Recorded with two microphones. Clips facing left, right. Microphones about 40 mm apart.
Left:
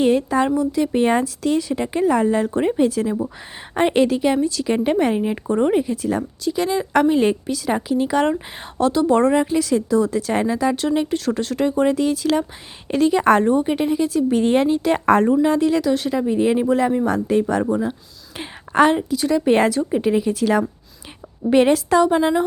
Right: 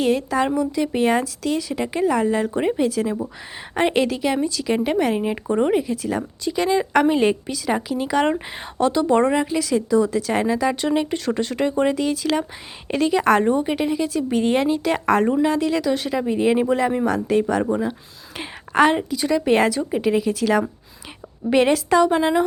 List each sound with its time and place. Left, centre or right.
0.0 s a woman's voice: centre
5.7 s a woman's voice: centre
18.3 s a sound: centre
19.1 s a woman's voice: centre